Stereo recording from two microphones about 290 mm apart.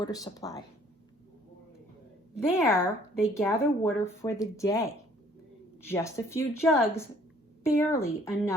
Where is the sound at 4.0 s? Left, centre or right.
Centre.